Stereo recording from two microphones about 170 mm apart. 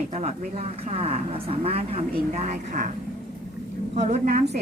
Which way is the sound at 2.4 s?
45° right (ahead or behind).